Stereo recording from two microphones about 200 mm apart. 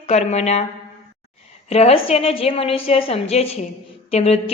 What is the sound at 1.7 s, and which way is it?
A woman's voice, 30° left (ahead or behind).